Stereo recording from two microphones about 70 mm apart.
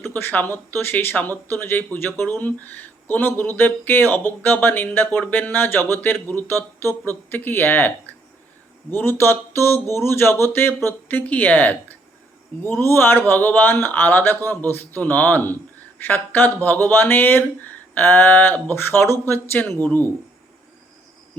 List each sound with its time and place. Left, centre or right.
0.0 s speech: left
12.8 s speech: left